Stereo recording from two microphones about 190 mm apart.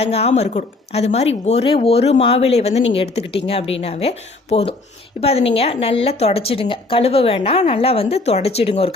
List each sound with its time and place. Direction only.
0.0 s a woman's voice: 35° left (ahead or behind)